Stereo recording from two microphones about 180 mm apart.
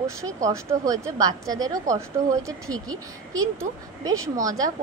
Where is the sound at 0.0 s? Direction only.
15° right (ahead or behind).